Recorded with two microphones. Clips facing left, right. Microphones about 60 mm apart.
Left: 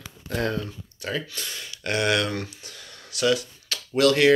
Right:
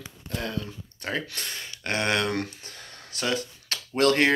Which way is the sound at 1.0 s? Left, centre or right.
Right.